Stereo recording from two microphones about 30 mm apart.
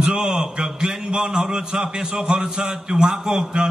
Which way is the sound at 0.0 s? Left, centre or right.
Right.